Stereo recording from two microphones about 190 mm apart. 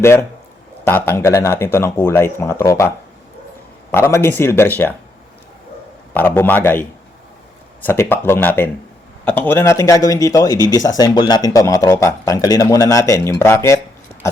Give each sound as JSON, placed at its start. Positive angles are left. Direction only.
{"t": 0.0, "sound": "speech", "side_deg": 15}
{"t": 3.9, "sound": "speech", "side_deg": 15}
{"t": 6.1, "sound": "speech", "side_deg": 10}